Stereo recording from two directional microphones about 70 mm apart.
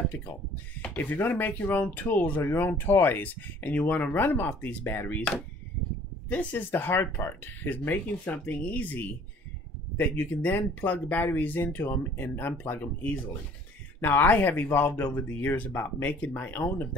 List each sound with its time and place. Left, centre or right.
0.8 s speech: left
6.3 s speech: left